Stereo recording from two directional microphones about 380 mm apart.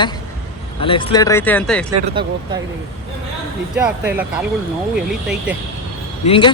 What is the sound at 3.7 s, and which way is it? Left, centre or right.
Speech, centre.